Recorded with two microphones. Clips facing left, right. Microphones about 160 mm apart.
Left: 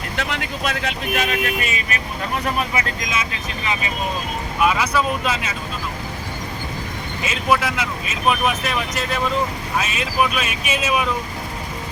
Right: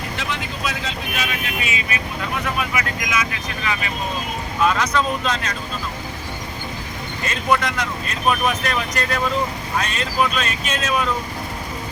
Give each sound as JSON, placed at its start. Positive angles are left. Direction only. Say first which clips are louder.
{"t": 0.2, "sound": "speech", "louder": "left 4 dB", "side_deg": 65}
{"t": 2.4, "sound": "speech", "louder": "left 2 dB", "side_deg": 30}
{"t": 4.6, "sound": "speech", "louder": "even", "side_deg": 10}
{"t": 7.2, "sound": "speech", "louder": "even", "side_deg": 5}